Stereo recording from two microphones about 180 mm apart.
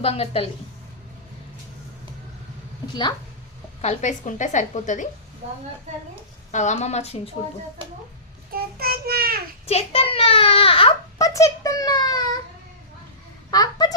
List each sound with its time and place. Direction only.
0.0 s a child's voice: 35° left (ahead or behind)
3.8 s a woman's voice: 40° left (ahead or behind)
6.5 s a child's voice: 40° left (ahead or behind)
8.8 s child singing: 55° right (ahead or behind)
9.6 s a child's voice: 35° left (ahead or behind)
11.2 s a sound: 15° left (ahead or behind)
13.5 s a sound: 20° left (ahead or behind)